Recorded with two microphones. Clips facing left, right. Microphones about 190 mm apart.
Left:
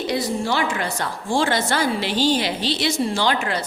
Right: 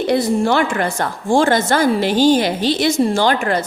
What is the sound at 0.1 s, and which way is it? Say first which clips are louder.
A woman's voice: right 8 dB; 55° right (ahead or behind).